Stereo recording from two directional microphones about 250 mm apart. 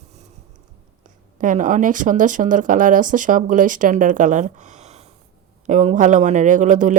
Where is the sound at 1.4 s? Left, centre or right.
Right.